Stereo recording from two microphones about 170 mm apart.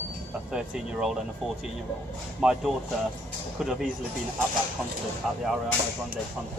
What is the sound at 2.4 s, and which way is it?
Speech, 5° right (ahead or behind).